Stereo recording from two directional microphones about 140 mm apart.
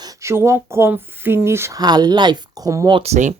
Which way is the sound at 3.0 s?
55° right (ahead or behind).